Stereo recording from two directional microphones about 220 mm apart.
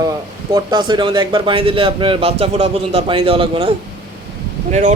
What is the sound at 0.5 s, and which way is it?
A man's voice, 20° right (ahead or behind).